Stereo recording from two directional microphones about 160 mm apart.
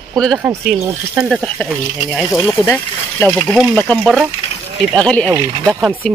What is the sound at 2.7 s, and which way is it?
Speech, 10° left (ahead or behind).